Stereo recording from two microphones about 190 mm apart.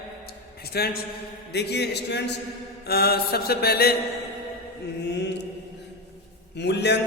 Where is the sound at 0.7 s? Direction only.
55° left (ahead or behind).